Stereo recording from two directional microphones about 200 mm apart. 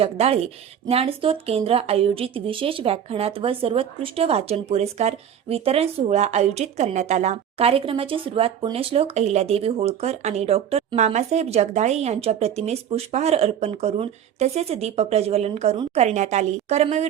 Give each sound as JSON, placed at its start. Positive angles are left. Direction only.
{"t": 0.0, "sound": "speech", "side_deg": -30}